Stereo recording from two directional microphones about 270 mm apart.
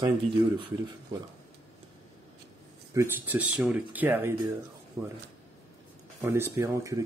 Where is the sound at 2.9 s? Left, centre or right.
Centre.